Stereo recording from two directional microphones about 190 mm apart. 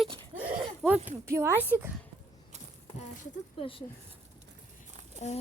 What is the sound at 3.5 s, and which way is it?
Speech, 30° left (ahead or behind).